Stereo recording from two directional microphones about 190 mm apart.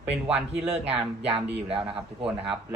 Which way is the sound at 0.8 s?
30° right (ahead or behind).